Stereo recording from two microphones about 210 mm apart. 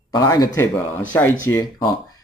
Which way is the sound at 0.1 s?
15° left (ahead or behind).